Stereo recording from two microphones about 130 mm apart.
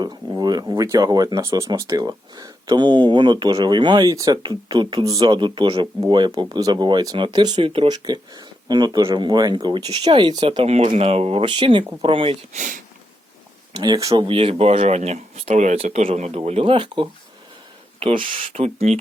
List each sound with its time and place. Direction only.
0.0 s speech: 30° right (ahead or behind)
10.9 s speech: 50° right (ahead or behind)
12.5 s speech: 90° right
13.7 s speech: 30° right (ahead or behind)
14.1 s speech: 45° right (ahead or behind)